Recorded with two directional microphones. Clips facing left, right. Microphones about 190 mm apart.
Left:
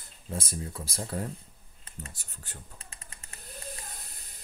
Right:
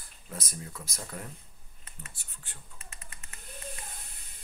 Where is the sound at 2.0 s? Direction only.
40° left (ahead or behind).